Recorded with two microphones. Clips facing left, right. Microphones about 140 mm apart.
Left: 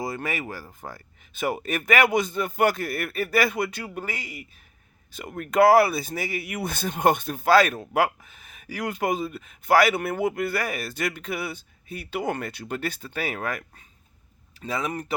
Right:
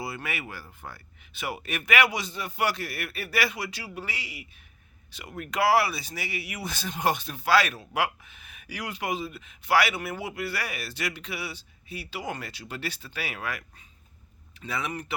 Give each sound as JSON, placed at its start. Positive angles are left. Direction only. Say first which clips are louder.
{"t": 0.0, "sound": "speech", "louder": "left 5 dB", "side_deg": 40}